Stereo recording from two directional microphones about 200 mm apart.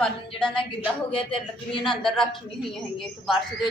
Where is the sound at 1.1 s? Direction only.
25° left (ahead or behind).